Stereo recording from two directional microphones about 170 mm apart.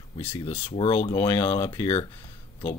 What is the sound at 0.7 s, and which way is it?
Speech, 35° left (ahead or behind).